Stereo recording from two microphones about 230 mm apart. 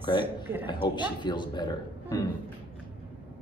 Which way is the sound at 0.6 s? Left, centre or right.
Centre.